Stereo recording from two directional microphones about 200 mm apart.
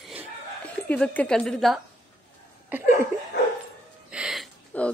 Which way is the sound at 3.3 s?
55° left (ahead or behind).